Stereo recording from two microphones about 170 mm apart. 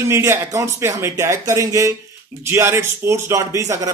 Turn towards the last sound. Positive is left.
turn(degrees=-20)  # may be behind; listen again after turning